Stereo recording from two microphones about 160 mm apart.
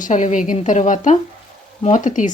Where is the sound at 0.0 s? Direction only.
50° left (ahead or behind).